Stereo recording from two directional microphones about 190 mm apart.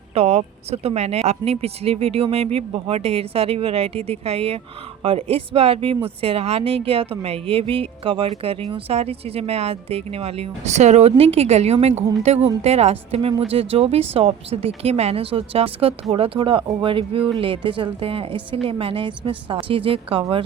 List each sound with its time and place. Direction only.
0.1 s speech: 35° right (ahead or behind)